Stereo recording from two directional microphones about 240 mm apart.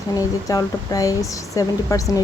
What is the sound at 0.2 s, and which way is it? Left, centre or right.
Speech, centre.